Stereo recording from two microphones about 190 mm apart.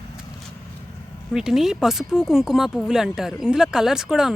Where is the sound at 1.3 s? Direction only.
Centre (ahead or behind).